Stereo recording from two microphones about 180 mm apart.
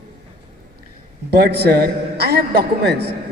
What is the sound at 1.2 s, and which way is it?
A man's voice, 60° right (ahead or behind).